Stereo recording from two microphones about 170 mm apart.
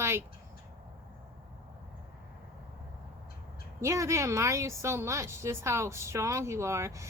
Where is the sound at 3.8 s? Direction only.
15° right (ahead or behind).